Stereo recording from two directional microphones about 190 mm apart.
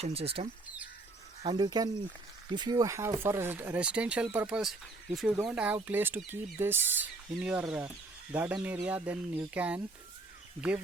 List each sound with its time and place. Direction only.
0.0 s speech: 30° right (ahead or behind); by 9.8 s 10° right (ahead or behind)